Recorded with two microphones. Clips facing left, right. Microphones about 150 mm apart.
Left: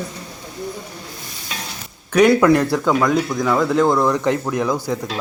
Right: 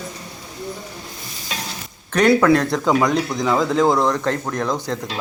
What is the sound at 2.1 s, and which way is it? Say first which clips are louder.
Speech: left 2 dB; 10° left (ahead or behind).